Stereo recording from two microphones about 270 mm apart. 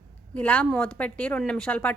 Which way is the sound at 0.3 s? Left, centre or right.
Centre.